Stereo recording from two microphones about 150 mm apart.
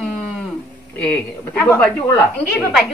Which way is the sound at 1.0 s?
10° left (ahead or behind).